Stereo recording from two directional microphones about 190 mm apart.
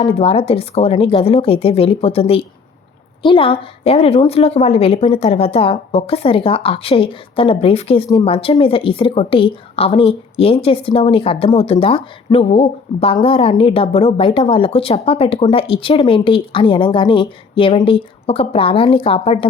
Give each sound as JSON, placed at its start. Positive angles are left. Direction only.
{"t": 0.0, "sound": "a woman's voice", "side_deg": 30}